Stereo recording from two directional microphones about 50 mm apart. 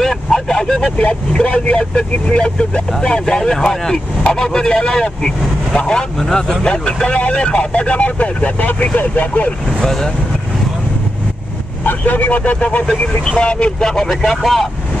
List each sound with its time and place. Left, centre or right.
0.0 s vehicle: centre
0.9 s speech: left
6.2 s speech: centre
6.6 s speech: centre; by 9.5 s left
9.7 s speech: centre
11.8 s speech: left; by 14.7 s centre